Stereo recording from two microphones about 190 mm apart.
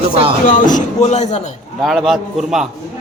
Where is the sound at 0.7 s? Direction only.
35° left (ahead or behind).